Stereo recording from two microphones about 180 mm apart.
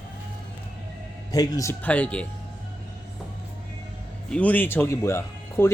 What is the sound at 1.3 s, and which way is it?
Speech, 20° left (ahead or behind).